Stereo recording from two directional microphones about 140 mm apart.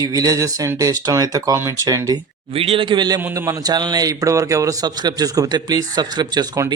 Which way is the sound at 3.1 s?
15° right (ahead or behind).